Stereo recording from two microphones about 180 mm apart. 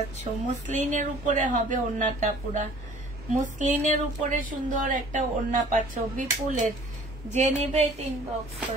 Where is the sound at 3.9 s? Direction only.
45° right (ahead or behind).